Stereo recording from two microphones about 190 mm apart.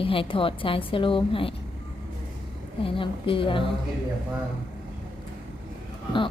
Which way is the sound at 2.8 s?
25° left (ahead or behind).